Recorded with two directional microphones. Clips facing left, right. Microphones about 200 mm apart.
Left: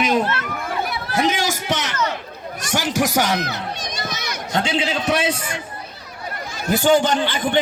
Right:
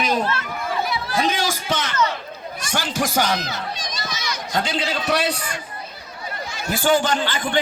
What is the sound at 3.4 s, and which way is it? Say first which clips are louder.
Speech: left 3 dB; 60° left (ahead or behind).